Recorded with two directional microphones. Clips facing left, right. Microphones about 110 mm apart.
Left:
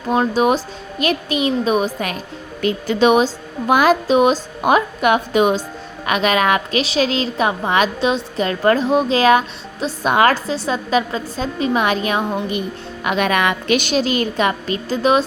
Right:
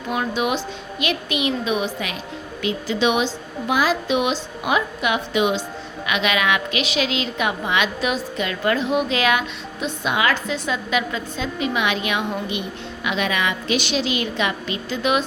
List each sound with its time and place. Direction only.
0.1 s a woman's voice: 35° left (ahead or behind)
13.1 s a woman's voice: 50° left (ahead or behind)